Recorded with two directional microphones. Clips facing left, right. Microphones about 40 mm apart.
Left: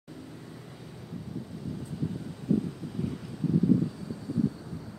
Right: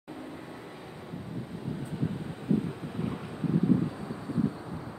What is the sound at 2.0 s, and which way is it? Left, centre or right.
Wind noise, right.